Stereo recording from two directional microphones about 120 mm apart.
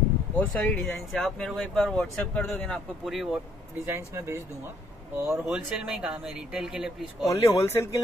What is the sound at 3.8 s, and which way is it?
Speech, 20° right (ahead or behind).